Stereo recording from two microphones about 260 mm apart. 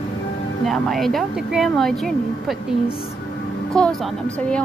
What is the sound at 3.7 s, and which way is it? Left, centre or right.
Speech, centre.